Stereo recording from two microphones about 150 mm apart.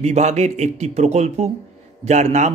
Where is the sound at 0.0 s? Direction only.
45° right (ahead or behind).